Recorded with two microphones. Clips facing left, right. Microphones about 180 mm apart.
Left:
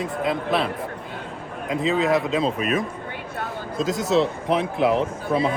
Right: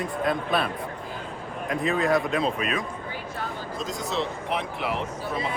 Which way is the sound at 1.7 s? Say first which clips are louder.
Left 3 dB; 20° left (ahead or behind).